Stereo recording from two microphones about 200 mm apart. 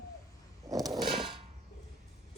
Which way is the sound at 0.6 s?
15° right (ahead or behind).